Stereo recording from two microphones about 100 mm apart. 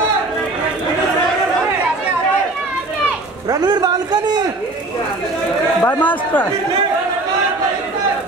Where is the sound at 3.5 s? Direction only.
45° right (ahead or behind).